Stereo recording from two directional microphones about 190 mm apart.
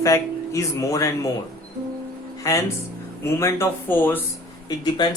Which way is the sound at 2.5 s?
15° left (ahead or behind).